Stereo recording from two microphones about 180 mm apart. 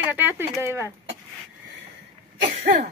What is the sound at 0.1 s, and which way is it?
Speech, 10° right (ahead or behind).